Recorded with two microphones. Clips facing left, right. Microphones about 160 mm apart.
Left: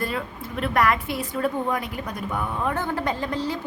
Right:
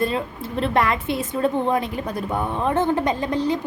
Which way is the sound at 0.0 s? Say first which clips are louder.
Right 5 dB; 25° right (ahead or behind).